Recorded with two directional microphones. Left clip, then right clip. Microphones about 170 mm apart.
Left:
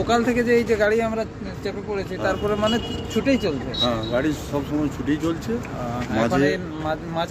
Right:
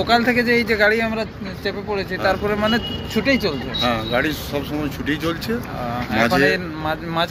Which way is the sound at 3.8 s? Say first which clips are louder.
Right 3 dB; 30° left (ahead or behind).